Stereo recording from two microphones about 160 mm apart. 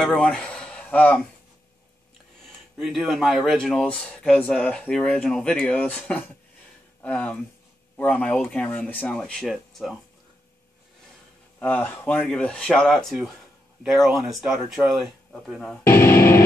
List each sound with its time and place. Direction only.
0.0 s speech: 5° left (ahead or behind)
2.8 s speech: centre (ahead or behind)
11.6 s speech: 10° left (ahead or behind)
15.8 s speech: 15° left (ahead or behind)